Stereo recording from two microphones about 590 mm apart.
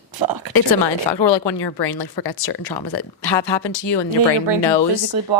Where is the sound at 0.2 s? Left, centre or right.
Right.